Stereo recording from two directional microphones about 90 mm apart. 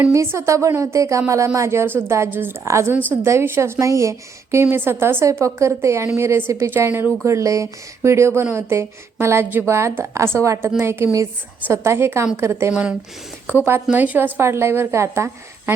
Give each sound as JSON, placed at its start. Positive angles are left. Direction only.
{"t": 0.1, "sound": "a woman's voice", "side_deg": -35}
{"t": 7.3, "sound": "a woman's voice", "side_deg": -35}
{"t": 12.7, "sound": "a woman's voice", "side_deg": -15}